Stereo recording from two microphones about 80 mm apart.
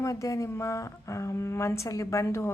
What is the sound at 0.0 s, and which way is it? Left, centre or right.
A woman's voice, left.